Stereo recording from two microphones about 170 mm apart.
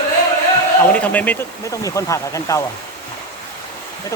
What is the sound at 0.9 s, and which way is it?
Speech, 10° left (ahead or behind).